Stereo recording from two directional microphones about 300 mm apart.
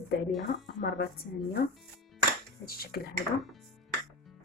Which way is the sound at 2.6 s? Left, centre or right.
Left.